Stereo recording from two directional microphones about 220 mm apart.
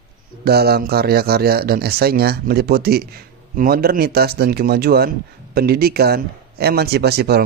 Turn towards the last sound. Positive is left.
turn(degrees=-45)  # may be behind; listen again after turning